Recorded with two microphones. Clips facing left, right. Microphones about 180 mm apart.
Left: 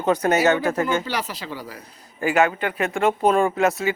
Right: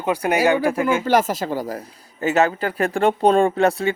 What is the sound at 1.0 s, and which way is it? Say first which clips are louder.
Speech: right 10 dB; 45° right (ahead or behind).